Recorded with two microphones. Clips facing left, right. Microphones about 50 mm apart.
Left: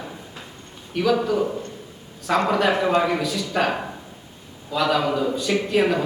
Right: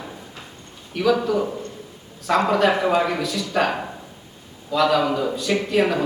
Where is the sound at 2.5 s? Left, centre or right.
Centre.